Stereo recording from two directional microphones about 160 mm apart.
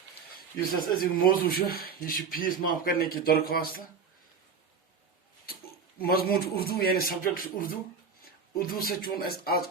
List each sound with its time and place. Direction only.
0.8 s a man's voice: 65° left (ahead or behind)
6.0 s a man's voice: 70° left (ahead or behind)